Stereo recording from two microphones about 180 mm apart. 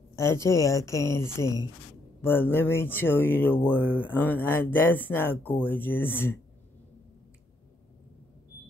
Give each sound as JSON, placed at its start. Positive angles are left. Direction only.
{"t": 0.1, "sound": "speech", "side_deg": 15}